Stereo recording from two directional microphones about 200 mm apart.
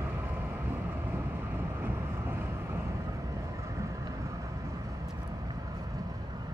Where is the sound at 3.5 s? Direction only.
15° right (ahead or behind).